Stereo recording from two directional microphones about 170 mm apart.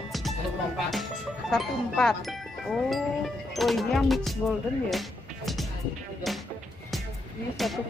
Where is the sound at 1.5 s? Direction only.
5° left (ahead or behind).